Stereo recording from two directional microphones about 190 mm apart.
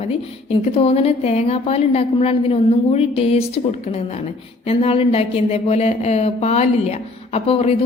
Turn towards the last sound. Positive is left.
turn(degrees=30)  # may be behind; listen again after turning